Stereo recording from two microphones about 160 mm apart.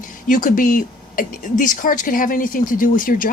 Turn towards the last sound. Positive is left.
turn(degrees=60)  # may be behind; listen again after turning